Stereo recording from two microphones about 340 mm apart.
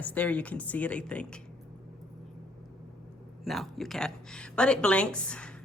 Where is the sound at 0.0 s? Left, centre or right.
Centre.